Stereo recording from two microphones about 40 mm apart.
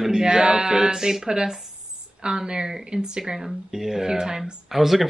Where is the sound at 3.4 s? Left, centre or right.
Centre.